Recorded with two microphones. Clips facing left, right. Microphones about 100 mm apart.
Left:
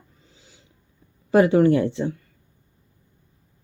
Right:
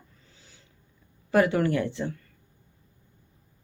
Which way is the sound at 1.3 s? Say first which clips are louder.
Left 6 dB; 25° left (ahead or behind).